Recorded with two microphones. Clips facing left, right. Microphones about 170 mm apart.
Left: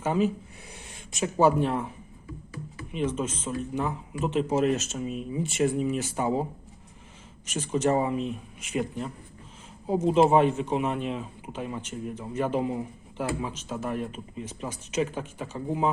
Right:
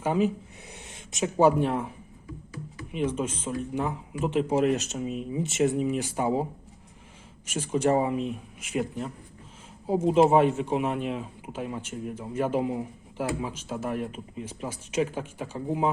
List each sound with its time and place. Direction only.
0.0 s speech: 15° right (ahead or behind)